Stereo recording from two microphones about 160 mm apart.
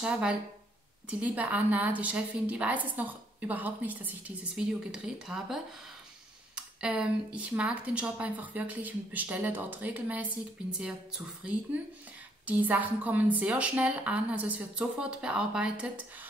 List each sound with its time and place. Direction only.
0.0 s a woman's voice: 5° right (ahead or behind)